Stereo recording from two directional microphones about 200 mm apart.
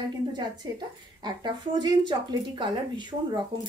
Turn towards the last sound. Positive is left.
turn(degrees=-20)  # may be behind; listen again after turning